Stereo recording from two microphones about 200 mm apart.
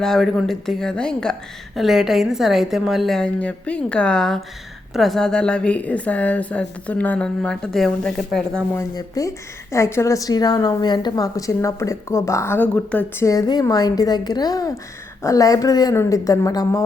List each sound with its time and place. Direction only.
0.0 s a woman's voice: centre (ahead or behind); by 16.8 s 20° left (ahead or behind)